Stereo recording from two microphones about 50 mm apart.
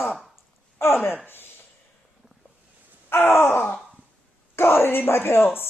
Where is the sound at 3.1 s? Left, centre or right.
Left.